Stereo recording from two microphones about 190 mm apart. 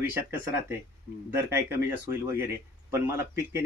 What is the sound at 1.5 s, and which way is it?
Speech, 10° right (ahead or behind).